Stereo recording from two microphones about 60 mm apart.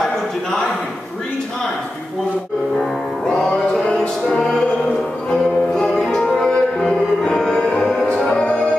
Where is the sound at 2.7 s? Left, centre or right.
Centre.